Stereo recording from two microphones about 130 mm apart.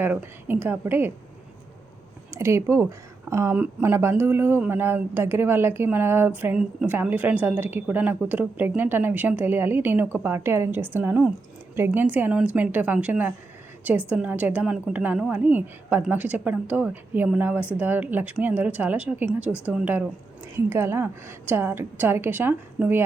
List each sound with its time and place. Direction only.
0.0 s speech: 15° right (ahead or behind)
2.3 s speech: 20° right (ahead or behind)